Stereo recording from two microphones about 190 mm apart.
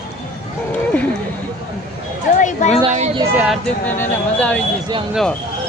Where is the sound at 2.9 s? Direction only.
40° right (ahead or behind).